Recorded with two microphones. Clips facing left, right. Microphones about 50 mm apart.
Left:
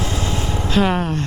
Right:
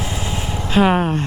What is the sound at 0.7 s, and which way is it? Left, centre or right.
Speech, right.